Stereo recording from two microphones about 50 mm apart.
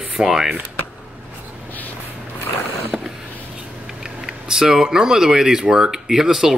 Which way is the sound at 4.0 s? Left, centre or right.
Centre.